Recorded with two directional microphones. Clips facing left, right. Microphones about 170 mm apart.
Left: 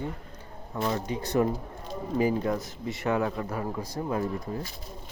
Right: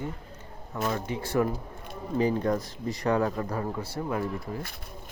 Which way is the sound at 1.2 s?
20° left (ahead or behind).